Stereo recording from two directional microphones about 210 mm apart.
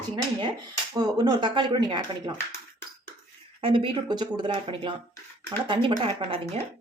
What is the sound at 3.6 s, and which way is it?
Speech, 25° right (ahead or behind).